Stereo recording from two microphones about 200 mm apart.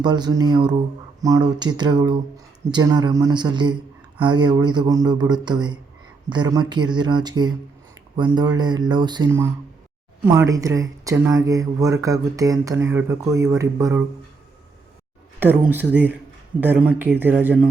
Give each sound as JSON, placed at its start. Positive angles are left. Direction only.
{"t": 0.0, "sound": "speech", "side_deg": -20}
{"t": 10.5, "sound": "speech", "side_deg": -15}
{"t": 15.4, "sound": "speech", "side_deg": -10}